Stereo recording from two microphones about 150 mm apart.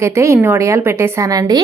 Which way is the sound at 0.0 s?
20° right (ahead or behind).